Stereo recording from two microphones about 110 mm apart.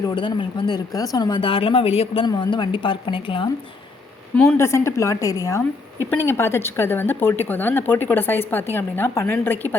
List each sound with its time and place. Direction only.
0.1 s a woman's voice: 50° left (ahead or behind)
0.9 s speech: 35° left (ahead or behind); by 2.2 s 65° left (ahead or behind)
2.2 s a woman's voice: 40° left (ahead or behind)
4.4 s speech: 25° left (ahead or behind)